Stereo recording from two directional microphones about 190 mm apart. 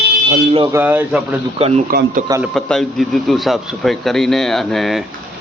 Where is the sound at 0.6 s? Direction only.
10° right (ahead or behind).